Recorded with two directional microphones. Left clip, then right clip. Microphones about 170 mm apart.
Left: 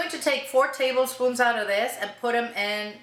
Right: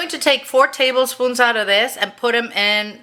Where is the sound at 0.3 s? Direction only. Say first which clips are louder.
Right 8 dB; 45° right (ahead or behind).